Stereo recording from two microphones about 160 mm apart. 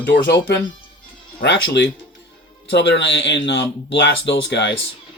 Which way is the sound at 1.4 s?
90° left.